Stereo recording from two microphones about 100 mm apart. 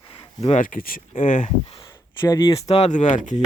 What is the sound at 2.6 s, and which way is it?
Speech, 90° left.